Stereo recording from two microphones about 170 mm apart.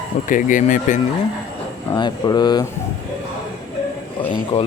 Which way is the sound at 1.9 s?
25° left (ahead or behind).